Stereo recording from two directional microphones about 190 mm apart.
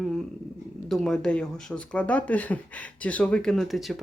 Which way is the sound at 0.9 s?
Centre (ahead or behind).